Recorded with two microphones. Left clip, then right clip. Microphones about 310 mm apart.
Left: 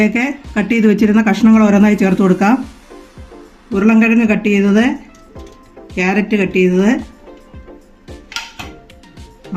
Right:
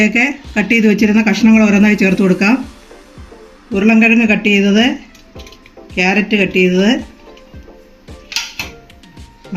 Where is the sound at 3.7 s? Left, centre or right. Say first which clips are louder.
Right 2 dB; left.